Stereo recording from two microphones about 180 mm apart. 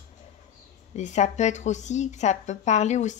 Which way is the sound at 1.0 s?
40° left (ahead or behind).